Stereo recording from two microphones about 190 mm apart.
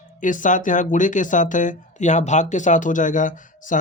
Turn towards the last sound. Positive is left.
turn(degrees=40)  # may be behind; listen again after turning